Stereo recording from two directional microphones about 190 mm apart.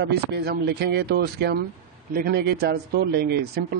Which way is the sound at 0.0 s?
60° right (ahead or behind).